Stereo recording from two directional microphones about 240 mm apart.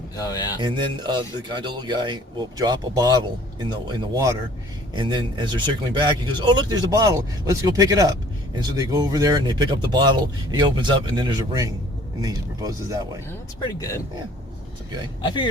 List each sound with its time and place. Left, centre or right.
0.2 s speech: centre
0.6 s speech: centre
13.7 s speech: centre
15.2 s speech: centre